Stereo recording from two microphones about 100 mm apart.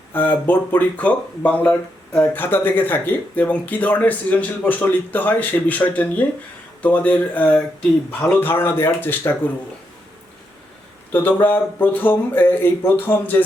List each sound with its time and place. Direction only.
0.1 s speech: 20° left (ahead or behind)
11.1 s speech: 20° left (ahead or behind)